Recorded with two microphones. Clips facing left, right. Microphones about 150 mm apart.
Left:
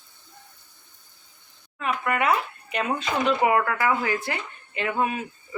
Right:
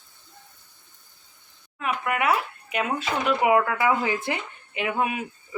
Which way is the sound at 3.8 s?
20° right (ahead or behind).